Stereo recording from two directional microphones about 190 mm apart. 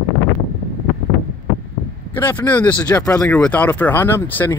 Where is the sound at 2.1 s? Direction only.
10° left (ahead or behind).